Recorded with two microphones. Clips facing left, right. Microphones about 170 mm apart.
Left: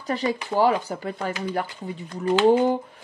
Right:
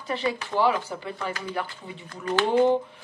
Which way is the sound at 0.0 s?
40° left (ahead or behind).